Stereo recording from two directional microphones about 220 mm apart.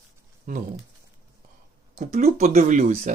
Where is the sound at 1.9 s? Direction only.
30° right (ahead or behind).